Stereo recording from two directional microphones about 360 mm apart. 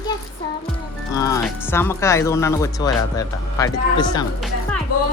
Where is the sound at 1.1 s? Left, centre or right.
Centre.